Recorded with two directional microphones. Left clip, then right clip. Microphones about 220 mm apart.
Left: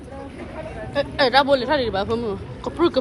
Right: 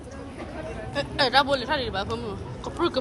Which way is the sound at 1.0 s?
15° right (ahead or behind).